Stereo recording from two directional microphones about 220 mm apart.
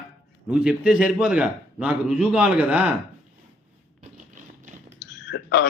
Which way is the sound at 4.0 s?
35° right (ahead or behind).